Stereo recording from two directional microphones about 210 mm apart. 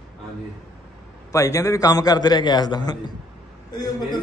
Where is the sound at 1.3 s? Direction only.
15° left (ahead or behind).